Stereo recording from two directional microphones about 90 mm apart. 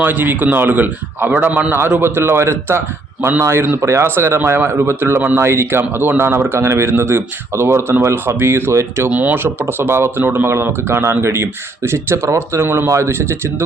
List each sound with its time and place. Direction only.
0.0 s speech: 20° right (ahead or behind)
2.0 s speech: 25° right (ahead or behind)
9.0 s speech: 20° right (ahead or behind)